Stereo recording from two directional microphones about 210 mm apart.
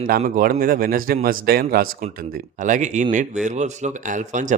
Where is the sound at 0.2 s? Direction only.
40° right (ahead or behind).